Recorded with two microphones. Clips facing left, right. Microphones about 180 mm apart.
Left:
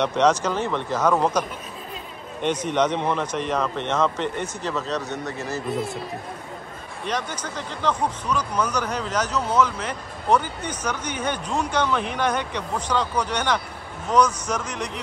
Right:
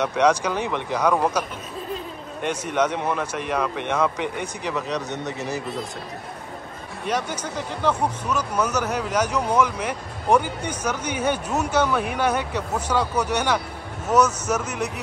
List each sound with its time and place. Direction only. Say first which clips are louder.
0.0 s speech: even; 10° right (ahead or behind)
2.4 s speech: left 1 dB; 10° right (ahead or behind)
7.1 s speech: right 2 dB; 10° right (ahead or behind)